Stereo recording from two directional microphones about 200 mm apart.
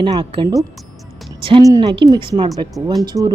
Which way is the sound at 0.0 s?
25° right (ahead or behind).